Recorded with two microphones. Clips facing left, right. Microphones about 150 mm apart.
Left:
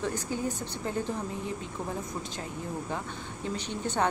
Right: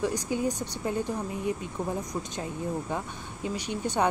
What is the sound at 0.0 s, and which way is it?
Speech, 15° right (ahead or behind).